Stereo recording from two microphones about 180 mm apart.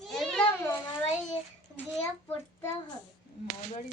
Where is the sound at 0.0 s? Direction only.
Centre (ahead or behind).